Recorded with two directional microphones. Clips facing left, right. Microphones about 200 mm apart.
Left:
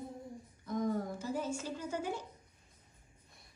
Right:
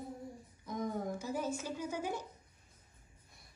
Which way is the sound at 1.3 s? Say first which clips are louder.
Left 2 dB; 10° right (ahead or behind).